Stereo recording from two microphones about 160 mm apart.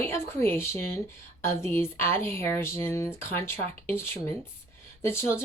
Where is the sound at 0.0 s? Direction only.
15° left (ahead or behind).